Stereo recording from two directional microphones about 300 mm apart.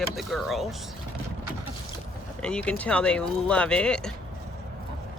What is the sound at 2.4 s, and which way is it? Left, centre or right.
Speech, centre.